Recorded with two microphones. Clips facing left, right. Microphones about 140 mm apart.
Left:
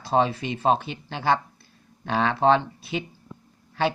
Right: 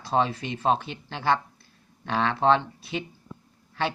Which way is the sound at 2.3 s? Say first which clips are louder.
Left 2 dB; 10° left (ahead or behind).